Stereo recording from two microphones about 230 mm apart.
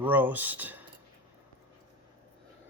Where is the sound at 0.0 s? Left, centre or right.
Centre.